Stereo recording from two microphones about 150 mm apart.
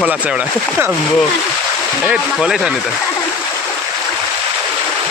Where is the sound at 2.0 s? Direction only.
5° right (ahead or behind).